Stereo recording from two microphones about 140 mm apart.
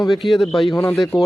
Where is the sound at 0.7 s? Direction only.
20° left (ahead or behind).